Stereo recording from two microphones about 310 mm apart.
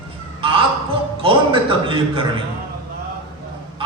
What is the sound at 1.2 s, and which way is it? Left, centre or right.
A man's voice, centre.